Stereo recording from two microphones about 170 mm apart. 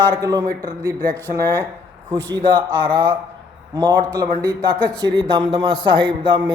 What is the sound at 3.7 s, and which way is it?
A man's voice, 20° right (ahead or behind).